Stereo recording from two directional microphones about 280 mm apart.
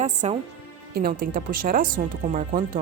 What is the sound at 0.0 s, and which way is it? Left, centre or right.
Speech, right.